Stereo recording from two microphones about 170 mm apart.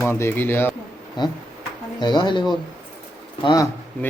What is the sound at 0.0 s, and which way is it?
Speech, 15° left (ahead or behind).